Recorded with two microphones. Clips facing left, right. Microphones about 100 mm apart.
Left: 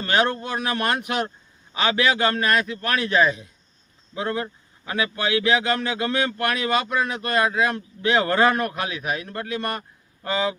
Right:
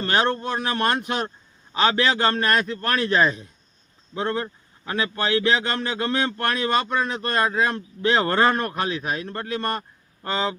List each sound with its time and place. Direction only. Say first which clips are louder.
0.0 s speech: even; 30° right (ahead or behind)